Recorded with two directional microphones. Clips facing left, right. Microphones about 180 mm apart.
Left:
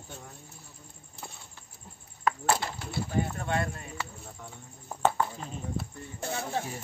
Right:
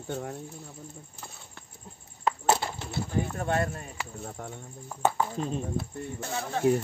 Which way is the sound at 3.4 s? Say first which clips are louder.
Right 3 dB; 45° right (ahead or behind).